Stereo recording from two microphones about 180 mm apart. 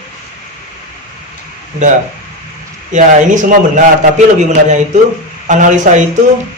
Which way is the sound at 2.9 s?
45° right (ahead or behind).